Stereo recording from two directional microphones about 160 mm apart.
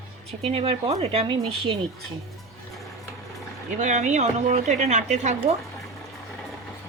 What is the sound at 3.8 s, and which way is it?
Speech, 50° right (ahead or behind).